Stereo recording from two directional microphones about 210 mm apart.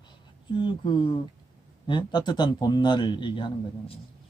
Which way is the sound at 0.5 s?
20° left (ahead or behind).